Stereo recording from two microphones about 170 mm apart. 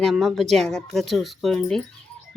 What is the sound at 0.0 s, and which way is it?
Speech, centre (ahead or behind).